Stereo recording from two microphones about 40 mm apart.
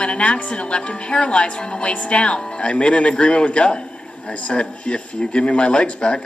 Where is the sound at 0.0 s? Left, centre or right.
Left.